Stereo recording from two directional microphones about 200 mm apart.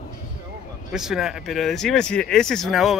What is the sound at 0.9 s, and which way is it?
Speech, 5° right (ahead or behind).